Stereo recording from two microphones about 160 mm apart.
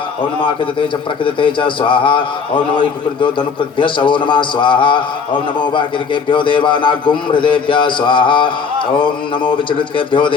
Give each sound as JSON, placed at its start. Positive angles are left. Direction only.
{"t": 0.4, "sound": "a man's voice", "side_deg": 30}